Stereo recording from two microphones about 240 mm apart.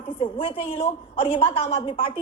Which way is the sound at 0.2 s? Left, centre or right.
Left.